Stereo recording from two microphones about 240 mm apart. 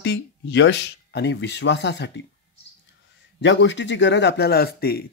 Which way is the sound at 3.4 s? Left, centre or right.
Left.